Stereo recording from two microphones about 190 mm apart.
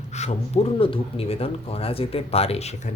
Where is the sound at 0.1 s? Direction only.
35° left (ahead or behind).